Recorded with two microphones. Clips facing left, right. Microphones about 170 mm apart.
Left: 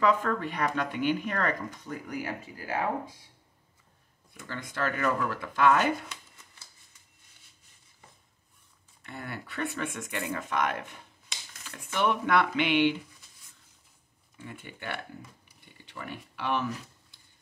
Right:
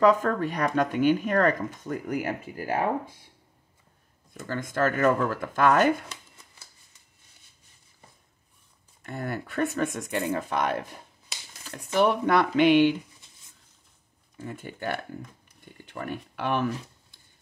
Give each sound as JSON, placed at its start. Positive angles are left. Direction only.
{"t": 0.0, "sound": "speech", "side_deg": -40}
{"t": 4.3, "sound": "speech", "side_deg": -45}
{"t": 9.0, "sound": "speech", "side_deg": -45}
{"t": 14.3, "sound": "speech", "side_deg": -40}